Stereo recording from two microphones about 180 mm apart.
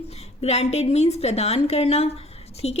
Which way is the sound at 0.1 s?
35° left (ahead or behind).